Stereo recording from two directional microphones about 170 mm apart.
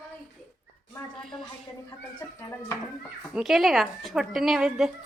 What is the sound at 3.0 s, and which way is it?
A woman's voice, 5° right (ahead or behind).